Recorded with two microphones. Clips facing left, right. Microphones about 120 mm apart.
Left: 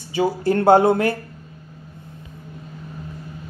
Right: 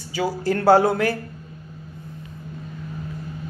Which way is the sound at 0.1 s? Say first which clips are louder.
Left 4 dB; 25° left (ahead or behind).